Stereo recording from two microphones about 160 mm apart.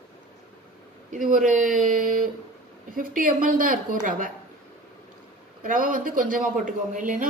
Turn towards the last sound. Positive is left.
turn(degrees=-55)  # may be behind; listen again after turning